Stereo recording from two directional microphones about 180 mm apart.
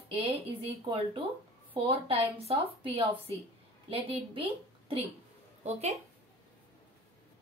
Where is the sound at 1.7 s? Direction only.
30° right (ahead or behind).